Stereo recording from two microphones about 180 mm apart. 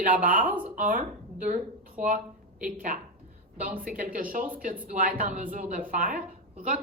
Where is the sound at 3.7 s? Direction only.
50° right (ahead or behind).